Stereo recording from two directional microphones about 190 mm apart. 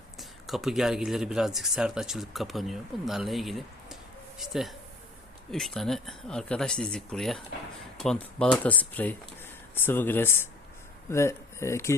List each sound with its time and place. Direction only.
0.2 s speech: centre (ahead or behind)